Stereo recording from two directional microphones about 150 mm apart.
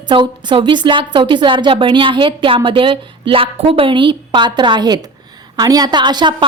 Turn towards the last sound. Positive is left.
turn(degrees=-30)  # may be behind; listen again after turning